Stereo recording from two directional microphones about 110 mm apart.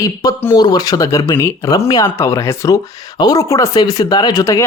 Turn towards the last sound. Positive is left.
turn(degrees=30)  # may be behind; listen again after turning